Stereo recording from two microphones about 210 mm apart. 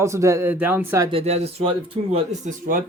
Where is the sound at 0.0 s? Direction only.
15° right (ahead or behind).